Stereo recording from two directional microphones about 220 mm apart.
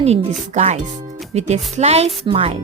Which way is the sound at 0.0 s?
30° right (ahead or behind).